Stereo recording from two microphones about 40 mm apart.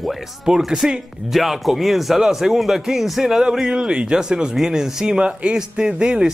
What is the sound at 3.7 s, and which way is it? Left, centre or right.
Speech, right.